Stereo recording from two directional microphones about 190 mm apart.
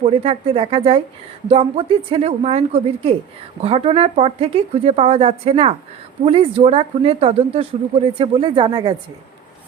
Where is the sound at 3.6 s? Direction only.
30° right (ahead or behind).